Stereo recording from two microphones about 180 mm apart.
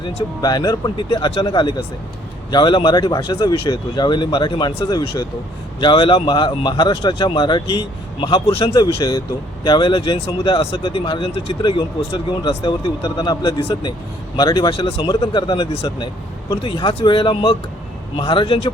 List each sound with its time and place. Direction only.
0.0 s speech: 35° left (ahead or behind)
0.4 s speech: 20° left (ahead or behind)
4.9 s speech: 20° left (ahead or behind)
9.0 s speech: 20° left (ahead or behind)
13.6 s speech: 30° left (ahead or behind)
14.3 s speech: 20° left (ahead or behind)
14.8 s speech: 30° left (ahead or behind)
15.7 s speech: 35° left (ahead or behind)